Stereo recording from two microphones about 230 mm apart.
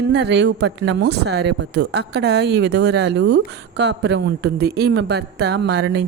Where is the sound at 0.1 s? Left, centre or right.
Right.